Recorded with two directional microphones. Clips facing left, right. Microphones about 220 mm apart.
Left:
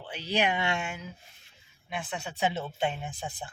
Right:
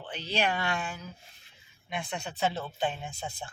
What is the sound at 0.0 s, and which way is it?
Speech, 10° left (ahead or behind).